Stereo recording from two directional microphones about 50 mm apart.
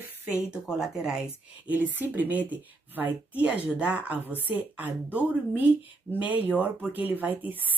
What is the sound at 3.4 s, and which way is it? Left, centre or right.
Speech, right.